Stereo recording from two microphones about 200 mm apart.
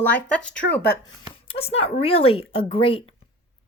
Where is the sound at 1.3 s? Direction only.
30° left (ahead or behind).